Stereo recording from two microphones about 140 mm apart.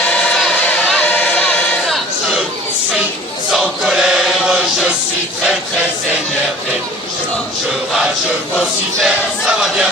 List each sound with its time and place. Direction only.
0.1 s a sound: 5° left (ahead or behind)
1.9 s chatter: centre (ahead or behind)
3.6 s choir: 5° right (ahead or behind)
8.5 s chant: centre (ahead or behind)